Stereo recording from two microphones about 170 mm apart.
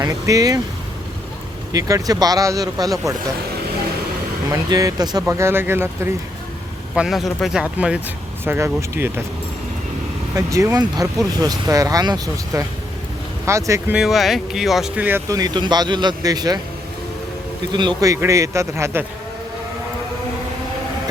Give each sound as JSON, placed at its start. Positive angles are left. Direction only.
{"t": 0.0, "sound": "speech", "side_deg": -20}
{"t": 1.7, "sound": "speech", "side_deg": -20}
{"t": 4.5, "sound": "speech", "side_deg": -20}
{"t": 6.9, "sound": "speech", "side_deg": -5}
{"t": 10.3, "sound": "speech", "side_deg": -20}
{"t": 13.9, "sound": "speech", "side_deg": 0}
{"t": 17.7, "sound": "speech", "side_deg": -25}